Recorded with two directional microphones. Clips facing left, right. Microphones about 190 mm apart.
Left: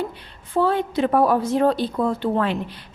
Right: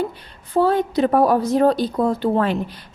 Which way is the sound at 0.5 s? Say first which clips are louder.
Right 3 dB; 40° right (ahead or behind).